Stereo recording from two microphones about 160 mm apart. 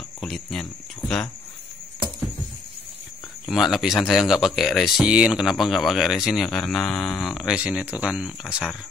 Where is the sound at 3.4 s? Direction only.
Centre (ahead or behind).